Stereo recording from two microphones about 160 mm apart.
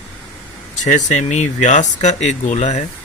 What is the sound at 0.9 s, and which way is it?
Speech, 50° left (ahead or behind).